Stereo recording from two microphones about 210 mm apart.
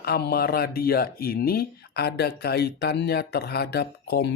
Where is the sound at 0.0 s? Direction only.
50° left (ahead or behind).